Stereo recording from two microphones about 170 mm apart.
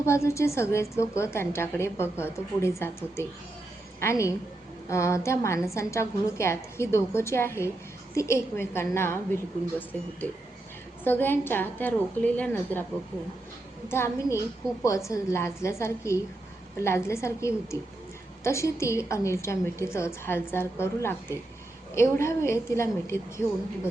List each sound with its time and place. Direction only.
0.0 s a woman's voice: 15° left (ahead or behind)
13.9 s a woman's voice: 15° left (ahead or behind)